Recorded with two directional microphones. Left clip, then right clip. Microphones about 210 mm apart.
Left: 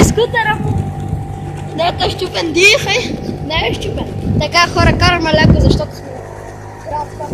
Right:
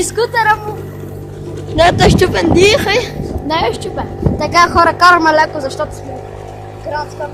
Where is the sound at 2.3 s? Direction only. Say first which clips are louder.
Even; 20° right (ahead or behind).